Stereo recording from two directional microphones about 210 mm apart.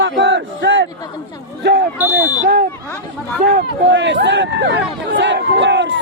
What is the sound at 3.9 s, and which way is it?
A man's voice, 60° right (ahead or behind).